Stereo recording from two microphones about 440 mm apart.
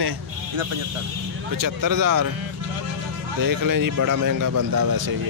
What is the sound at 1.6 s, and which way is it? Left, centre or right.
Speech, right.